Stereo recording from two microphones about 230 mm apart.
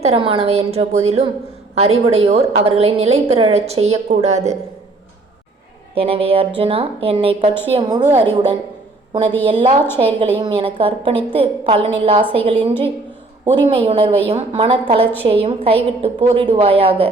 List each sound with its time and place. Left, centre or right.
0.0 s a woman's voice: right
5.9 s a woman's voice: right
9.2 s a woman's voice: centre
9.5 s a woman's voice: right